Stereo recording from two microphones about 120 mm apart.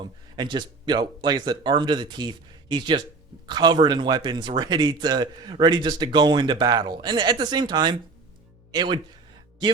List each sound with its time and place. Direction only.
0.3 s speech: 40° right (ahead or behind)